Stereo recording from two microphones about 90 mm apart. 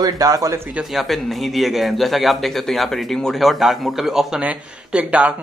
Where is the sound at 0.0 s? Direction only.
45° right (ahead or behind).